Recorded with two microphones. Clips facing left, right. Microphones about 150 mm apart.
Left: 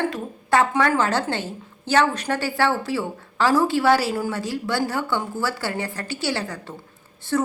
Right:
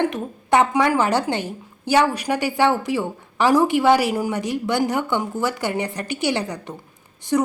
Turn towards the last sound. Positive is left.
turn(degrees=-15)  # may be behind; listen again after turning